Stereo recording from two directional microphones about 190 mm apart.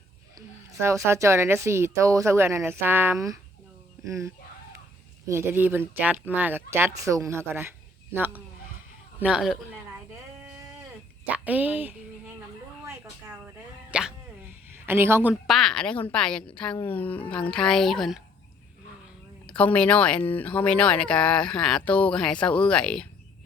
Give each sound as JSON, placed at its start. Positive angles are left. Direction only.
{"t": 0.3, "sound": "a woman's voice", "side_deg": -15}
{"t": 11.4, "sound": "speech", "side_deg": -10}
{"t": 12.8, "sound": "a sound", "side_deg": -10}
{"t": 16.6, "sound": "speech", "side_deg": 10}
{"t": 19.5, "sound": "speech", "side_deg": 5}